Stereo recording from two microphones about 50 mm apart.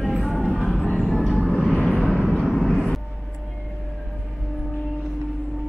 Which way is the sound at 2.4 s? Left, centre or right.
Centre.